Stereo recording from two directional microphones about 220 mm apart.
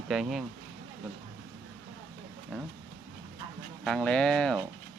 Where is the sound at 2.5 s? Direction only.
5° left (ahead or behind).